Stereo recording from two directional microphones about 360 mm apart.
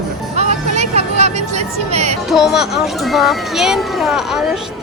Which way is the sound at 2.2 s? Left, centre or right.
Centre.